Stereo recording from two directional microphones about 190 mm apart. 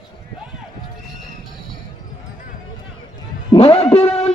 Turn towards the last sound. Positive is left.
turn(degrees=35)  # may be behind; listen again after turning